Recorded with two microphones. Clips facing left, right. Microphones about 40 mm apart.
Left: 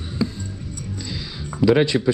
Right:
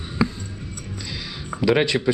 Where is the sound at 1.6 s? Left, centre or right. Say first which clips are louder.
Left 2 dB; right.